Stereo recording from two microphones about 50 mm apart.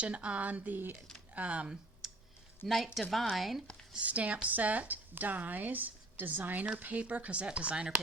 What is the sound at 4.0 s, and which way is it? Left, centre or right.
A woman's voice, right.